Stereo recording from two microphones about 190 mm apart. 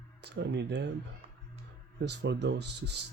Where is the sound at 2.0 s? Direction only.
65° right (ahead or behind).